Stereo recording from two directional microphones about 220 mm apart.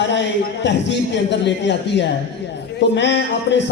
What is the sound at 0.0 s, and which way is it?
A man's voice, 55° left (ahead or behind).